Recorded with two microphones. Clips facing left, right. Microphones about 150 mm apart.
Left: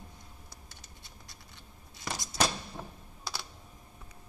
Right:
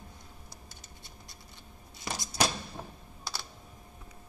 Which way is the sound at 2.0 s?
10° right (ahead or behind).